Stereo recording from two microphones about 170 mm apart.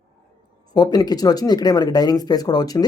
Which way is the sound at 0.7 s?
25° left (ahead or behind).